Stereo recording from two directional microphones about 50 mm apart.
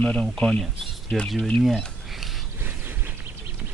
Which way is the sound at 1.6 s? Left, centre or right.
Centre.